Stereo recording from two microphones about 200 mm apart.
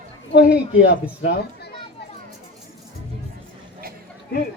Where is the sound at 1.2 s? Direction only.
55° left (ahead or behind).